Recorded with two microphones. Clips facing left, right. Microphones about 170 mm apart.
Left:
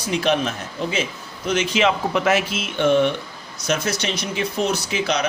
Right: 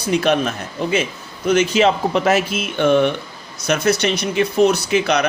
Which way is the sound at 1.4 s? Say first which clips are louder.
Right 5 dB; 45° right (ahead or behind).